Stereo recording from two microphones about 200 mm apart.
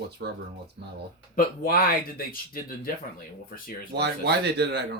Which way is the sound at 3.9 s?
55° right (ahead or behind).